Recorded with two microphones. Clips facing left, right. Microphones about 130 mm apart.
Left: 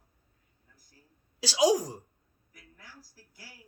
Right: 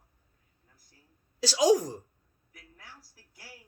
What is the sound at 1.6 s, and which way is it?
Speech, 40° left (ahead or behind).